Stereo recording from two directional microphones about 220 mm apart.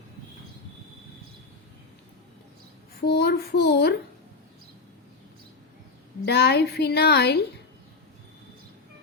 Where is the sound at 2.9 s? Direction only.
50° left (ahead or behind).